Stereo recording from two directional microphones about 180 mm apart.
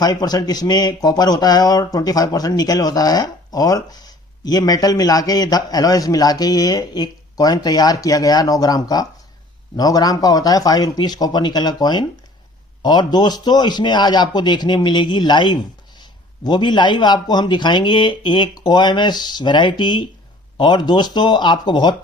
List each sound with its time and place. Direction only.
0.0 s speech: 20° left (ahead or behind)